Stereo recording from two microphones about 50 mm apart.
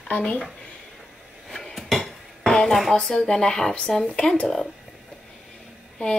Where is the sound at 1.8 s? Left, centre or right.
Centre.